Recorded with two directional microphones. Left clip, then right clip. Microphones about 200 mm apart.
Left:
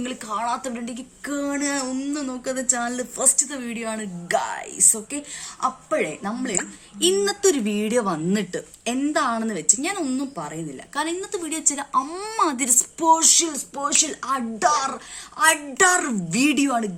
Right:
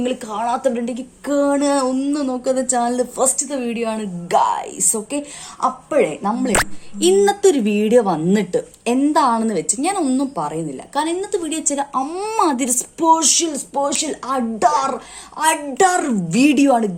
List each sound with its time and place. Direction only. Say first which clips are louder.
0.0 s speech: right 5 dB; 25° left (ahead or behind)